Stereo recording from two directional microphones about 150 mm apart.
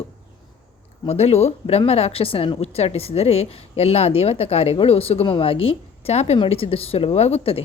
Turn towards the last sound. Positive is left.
turn(degrees=40)  # may be behind; listen again after turning